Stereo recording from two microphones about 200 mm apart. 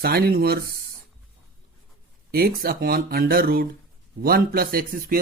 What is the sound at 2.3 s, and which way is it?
Speech, 50° right (ahead or behind).